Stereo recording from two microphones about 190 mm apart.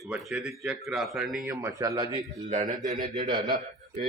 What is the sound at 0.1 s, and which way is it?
Speech, 5° right (ahead or behind).